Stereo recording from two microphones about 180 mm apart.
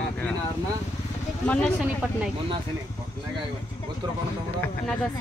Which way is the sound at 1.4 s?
5° left (ahead or behind).